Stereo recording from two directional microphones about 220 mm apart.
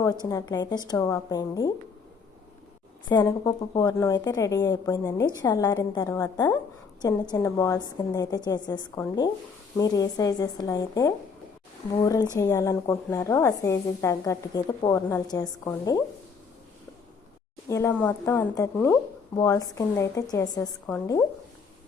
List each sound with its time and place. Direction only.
0.3 s a woman's voice: 15° left (ahead or behind)
3.1 s a woman's voice: 15° left (ahead or behind)
17.7 s a woman's voice: 15° left (ahead or behind)